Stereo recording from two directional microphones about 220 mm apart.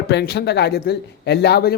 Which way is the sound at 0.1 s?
50° left (ahead or behind).